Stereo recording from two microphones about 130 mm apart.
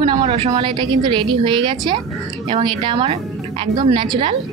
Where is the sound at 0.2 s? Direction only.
45° right (ahead or behind).